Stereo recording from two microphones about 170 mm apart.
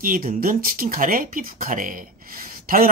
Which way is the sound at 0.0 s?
55° right (ahead or behind).